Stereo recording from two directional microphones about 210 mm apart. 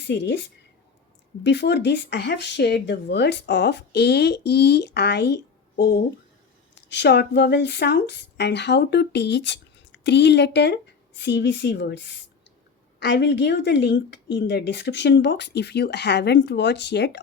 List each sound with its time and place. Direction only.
0.1 s speech: 55° left (ahead or behind)